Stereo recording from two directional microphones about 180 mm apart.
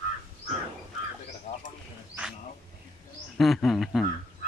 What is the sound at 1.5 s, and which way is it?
Bird, 30° left (ahead or behind).